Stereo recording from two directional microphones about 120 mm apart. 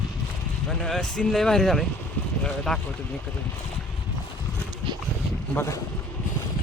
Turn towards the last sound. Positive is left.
turn(degrees=25)  # may be behind; listen again after turning